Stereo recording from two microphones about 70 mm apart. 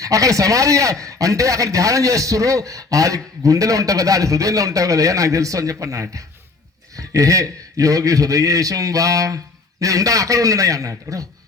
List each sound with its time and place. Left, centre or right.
0.0 s a man's voice: right